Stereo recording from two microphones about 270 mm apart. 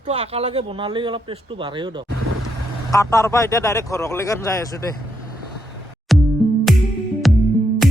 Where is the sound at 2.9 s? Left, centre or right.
Centre.